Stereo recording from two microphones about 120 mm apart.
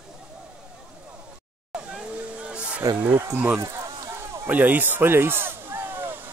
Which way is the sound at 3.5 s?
25° right (ahead or behind).